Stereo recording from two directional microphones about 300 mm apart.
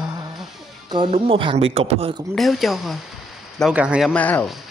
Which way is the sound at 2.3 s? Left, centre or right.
Centre.